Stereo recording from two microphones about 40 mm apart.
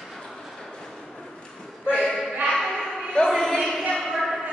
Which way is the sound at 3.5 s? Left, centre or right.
Centre.